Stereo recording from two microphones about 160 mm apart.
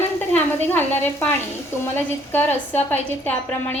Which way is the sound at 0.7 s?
10° left (ahead or behind).